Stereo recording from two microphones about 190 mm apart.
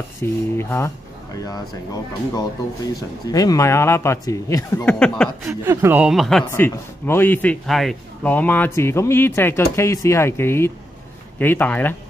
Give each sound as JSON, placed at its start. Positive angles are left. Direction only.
{"t": 0.2, "sound": "speech", "side_deg": 15}
{"t": 3.3, "sound": "speech", "side_deg": 20}
{"t": 5.5, "sound": "speech", "side_deg": -15}
{"t": 6.5, "sound": "speech", "side_deg": 10}